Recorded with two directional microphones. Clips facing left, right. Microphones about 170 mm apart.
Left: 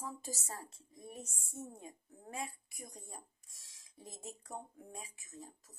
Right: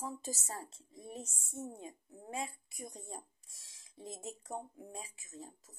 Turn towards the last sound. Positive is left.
turn(degrees=-25)  # may be behind; listen again after turning